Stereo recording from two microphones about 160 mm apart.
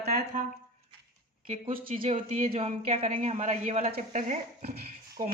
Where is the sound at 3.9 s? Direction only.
60° right (ahead or behind).